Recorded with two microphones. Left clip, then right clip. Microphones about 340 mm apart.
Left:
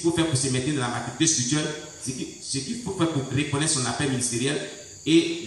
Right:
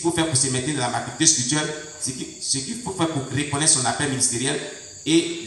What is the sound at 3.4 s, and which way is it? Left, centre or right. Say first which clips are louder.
Speech: right 1 dB; centre.